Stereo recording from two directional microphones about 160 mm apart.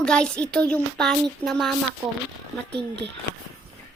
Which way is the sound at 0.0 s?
5° left (ahead or behind).